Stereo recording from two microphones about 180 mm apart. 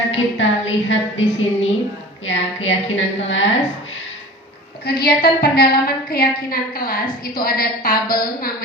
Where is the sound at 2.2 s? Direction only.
90° left.